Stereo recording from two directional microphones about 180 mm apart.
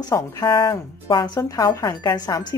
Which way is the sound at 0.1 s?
25° left (ahead or behind).